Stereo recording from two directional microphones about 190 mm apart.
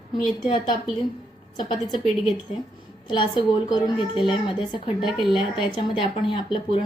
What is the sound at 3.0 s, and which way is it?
Speech, 25° left (ahead or behind).